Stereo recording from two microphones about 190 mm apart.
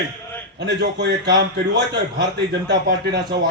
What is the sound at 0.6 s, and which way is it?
A man's voice, 65° right (ahead or behind).